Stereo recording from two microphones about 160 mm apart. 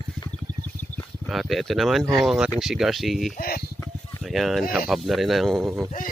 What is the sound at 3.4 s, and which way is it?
Speech, 65° left (ahead or behind).